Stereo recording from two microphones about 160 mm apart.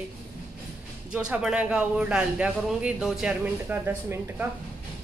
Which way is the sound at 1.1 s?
5° right (ahead or behind).